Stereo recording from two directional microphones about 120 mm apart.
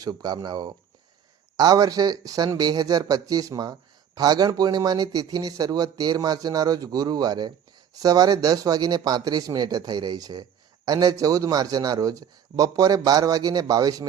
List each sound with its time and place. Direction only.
0.0 s speech: 35° right (ahead or behind)